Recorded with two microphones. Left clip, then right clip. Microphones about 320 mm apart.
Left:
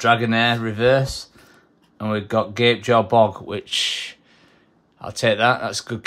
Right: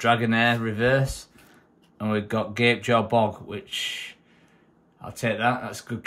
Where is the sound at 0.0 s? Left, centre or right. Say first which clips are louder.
Left 4 dB; centre.